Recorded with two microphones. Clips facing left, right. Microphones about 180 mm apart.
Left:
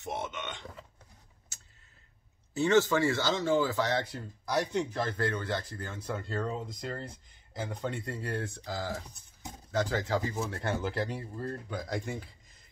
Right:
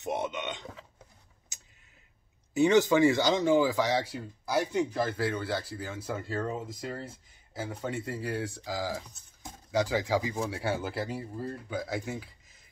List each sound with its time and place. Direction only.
0.0 s speech: 15° right (ahead or behind)
1.5 s a sound: 15° right (ahead or behind)
2.5 s speech: 15° right (ahead or behind)